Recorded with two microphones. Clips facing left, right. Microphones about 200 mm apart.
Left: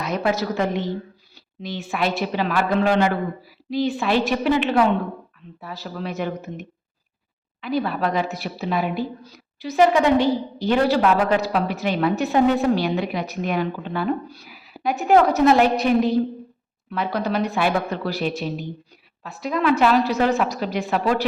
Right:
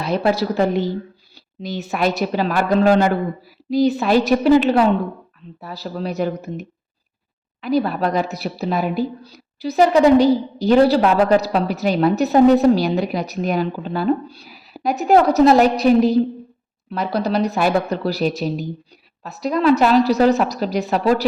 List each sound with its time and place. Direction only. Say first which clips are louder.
0.0 s a woman's voice: right 4 dB; 30° right (ahead or behind)